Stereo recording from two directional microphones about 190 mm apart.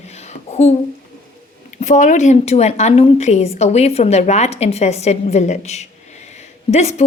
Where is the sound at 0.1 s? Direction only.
35° left (ahead or behind).